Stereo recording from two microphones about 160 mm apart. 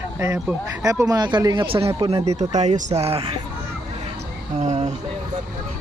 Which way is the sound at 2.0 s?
40° right (ahead or behind).